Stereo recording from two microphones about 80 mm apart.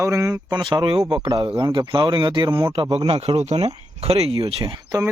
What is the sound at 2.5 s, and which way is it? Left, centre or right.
Speech, right.